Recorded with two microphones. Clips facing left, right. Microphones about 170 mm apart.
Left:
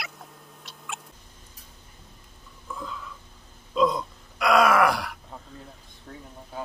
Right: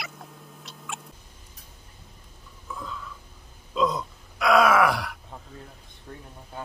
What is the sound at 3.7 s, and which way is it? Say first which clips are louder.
Groan: left 2 dB; centre (ahead or behind).